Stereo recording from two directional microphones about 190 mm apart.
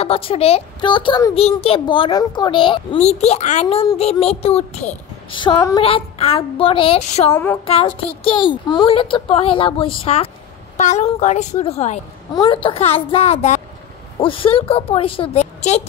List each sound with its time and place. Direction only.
0.0 s a child's voice: 30° left (ahead or behind)
5.4 s a sound: 15° left (ahead or behind)
5.8 s a child's voice: 30° left (ahead or behind)